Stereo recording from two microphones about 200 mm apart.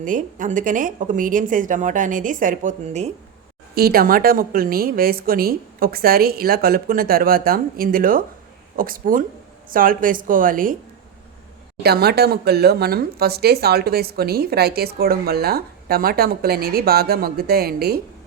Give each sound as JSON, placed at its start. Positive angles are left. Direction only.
{"t": 0.0, "sound": "speech", "side_deg": -40}
{"t": 3.8, "sound": "speech", "side_deg": -50}
{"t": 11.8, "sound": "speech", "side_deg": -55}